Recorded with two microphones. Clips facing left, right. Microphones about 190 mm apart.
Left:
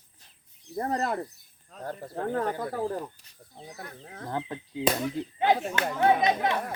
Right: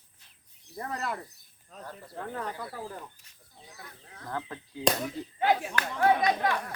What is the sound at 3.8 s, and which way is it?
Speech, 55° left (ahead or behind).